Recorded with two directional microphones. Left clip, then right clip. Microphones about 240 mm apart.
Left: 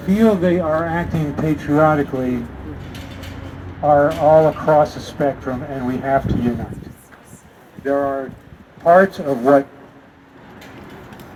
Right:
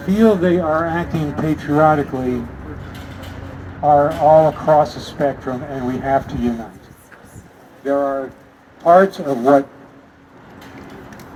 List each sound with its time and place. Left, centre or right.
0.1 s speech: left
3.9 s speech: left
7.9 s speech: centre